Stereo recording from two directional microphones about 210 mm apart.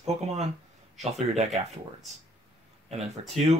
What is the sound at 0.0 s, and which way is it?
Speech, 30° right (ahead or behind).